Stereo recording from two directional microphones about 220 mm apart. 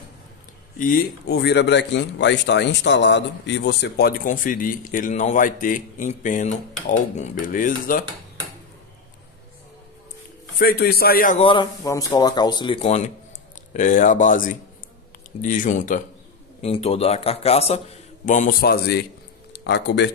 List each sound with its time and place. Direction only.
0.7 s speech: 40° left (ahead or behind)
10.6 s speech: 45° left (ahead or behind)
11.4 s a man's voice: 20° left (ahead or behind); by 20.1 s 50° left (ahead or behind)